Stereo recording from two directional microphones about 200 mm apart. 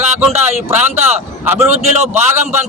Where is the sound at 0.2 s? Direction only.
10° right (ahead or behind).